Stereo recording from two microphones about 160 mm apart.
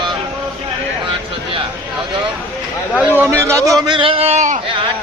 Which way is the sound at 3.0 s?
10° right (ahead or behind).